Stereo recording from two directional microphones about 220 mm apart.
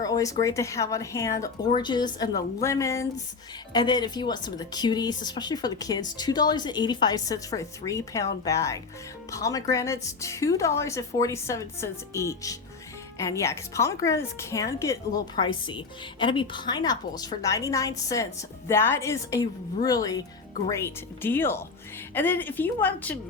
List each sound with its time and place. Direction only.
0.0 s speech: 15° left (ahead or behind)